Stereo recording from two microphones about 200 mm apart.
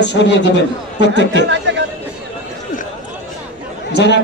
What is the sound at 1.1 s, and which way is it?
Speech, 65° right (ahead or behind).